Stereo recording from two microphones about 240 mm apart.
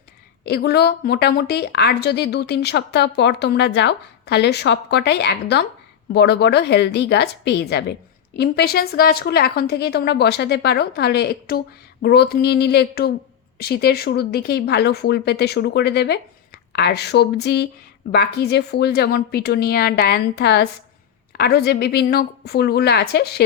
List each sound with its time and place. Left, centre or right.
0.4 s a woman's voice: left